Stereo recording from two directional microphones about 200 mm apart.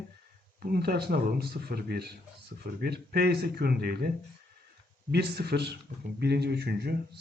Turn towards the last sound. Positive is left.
turn(degrees=-55)  # may be behind; listen again after turning